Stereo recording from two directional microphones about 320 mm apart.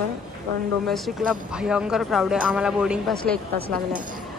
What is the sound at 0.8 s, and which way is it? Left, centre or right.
Speech, centre.